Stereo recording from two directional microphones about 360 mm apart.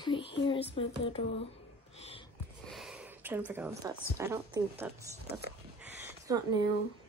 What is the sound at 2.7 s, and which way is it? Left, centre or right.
Speech, centre.